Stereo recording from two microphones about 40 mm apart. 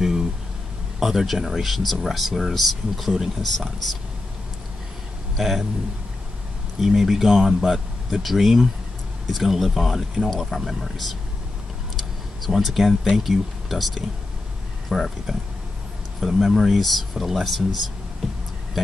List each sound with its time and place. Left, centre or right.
0.0 s a sound: centre
0.9 s speech: centre
6.8 s speech: centre
12.0 s a sound: centre
13.1 s speech: centre
16.2 s speech: centre